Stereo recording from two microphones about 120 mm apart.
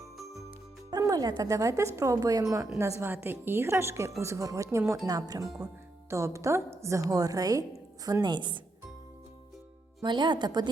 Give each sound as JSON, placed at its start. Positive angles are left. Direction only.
{"t": 0.9, "sound": "a woman's voice", "side_deg": -30}
{"t": 10.0, "sound": "a woman's voice", "side_deg": -40}